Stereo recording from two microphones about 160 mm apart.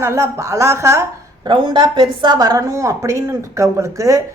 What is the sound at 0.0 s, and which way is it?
A woman's voice, 20° right (ahead or behind).